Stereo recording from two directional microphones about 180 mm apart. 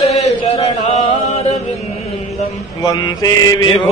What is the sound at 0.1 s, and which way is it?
Chant, 35° left (ahead or behind).